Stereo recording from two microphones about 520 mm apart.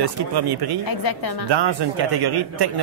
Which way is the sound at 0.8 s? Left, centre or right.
Left.